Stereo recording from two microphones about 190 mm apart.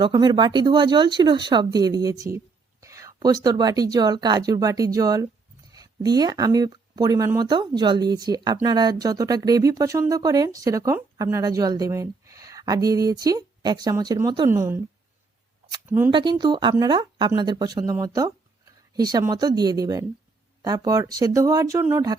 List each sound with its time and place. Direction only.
0.0 s speech: 20° right (ahead or behind)
16.1 s speech: 25° right (ahead or behind)